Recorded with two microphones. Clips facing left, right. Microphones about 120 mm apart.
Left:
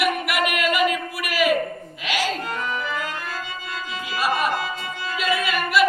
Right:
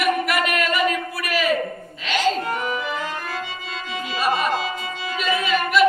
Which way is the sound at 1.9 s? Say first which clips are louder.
Even; 15° left (ahead or behind).